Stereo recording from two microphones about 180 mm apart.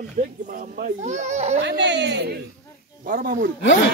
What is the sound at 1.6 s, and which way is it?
Speech, 75° right (ahead or behind).